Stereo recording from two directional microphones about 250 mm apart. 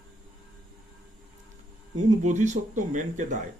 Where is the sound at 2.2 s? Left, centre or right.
Right.